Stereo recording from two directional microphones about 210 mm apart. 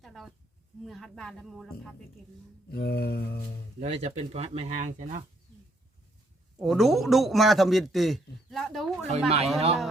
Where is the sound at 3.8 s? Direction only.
30° right (ahead or behind).